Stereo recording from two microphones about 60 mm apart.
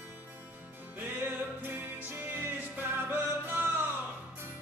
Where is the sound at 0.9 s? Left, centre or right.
Right.